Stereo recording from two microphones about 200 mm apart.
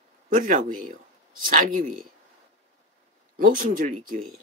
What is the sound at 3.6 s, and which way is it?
Speech, 40° right (ahead or behind).